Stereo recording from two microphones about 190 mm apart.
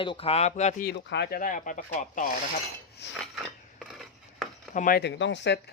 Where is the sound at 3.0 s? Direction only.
65° left (ahead or behind).